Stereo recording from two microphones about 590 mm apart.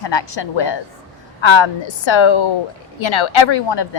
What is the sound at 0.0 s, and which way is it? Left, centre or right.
Speech, left.